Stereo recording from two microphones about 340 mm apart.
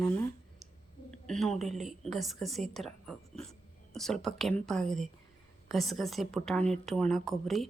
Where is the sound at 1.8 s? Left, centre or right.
Centre.